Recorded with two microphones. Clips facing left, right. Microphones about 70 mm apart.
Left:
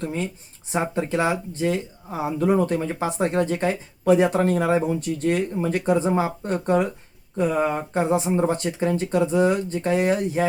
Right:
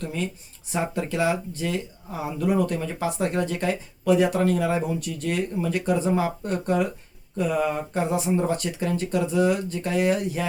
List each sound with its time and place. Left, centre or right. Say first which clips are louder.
0.0 s speech: left 2 dB; left